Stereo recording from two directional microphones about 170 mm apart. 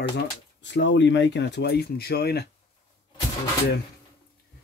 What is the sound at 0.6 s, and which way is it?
Speech, 90° left.